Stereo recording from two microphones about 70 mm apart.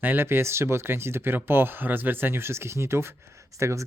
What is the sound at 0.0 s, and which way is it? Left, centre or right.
Speech, right.